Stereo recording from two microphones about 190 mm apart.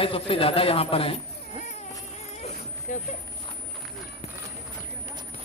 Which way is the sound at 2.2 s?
35° left (ahead or behind).